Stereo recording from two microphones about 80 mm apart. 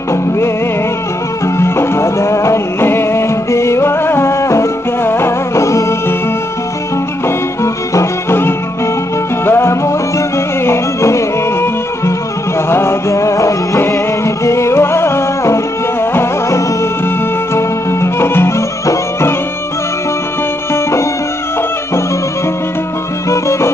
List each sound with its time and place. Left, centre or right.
1.6 s music: left
7.2 s music: left
23.3 s music: left